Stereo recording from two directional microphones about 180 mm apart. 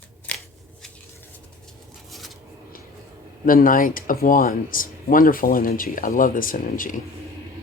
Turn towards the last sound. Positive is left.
turn(degrees=50)  # may be behind; listen again after turning